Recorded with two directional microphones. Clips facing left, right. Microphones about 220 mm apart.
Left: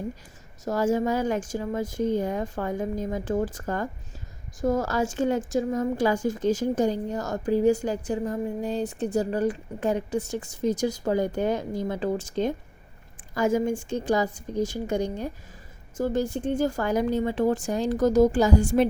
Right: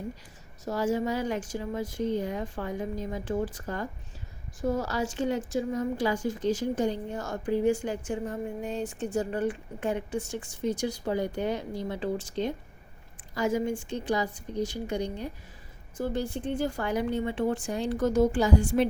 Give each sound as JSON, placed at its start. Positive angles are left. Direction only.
{"t": 0.6, "sound": "a woman's voice", "side_deg": 45}